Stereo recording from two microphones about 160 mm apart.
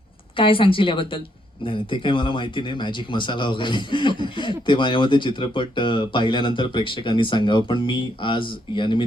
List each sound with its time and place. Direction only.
0.3 s speech: 35° left (ahead or behind)